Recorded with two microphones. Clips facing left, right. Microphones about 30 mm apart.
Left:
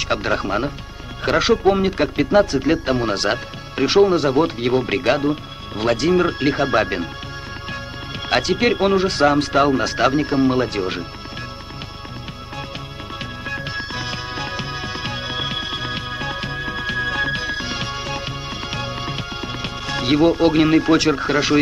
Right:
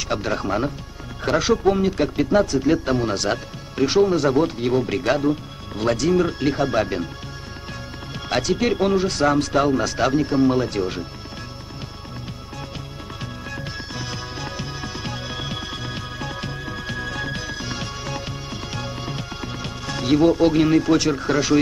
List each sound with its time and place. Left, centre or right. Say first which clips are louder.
0.0 s speech: left 3 dB; left
8.3 s speech: left 3 dB; left
13.2 s music: left 5 dB; left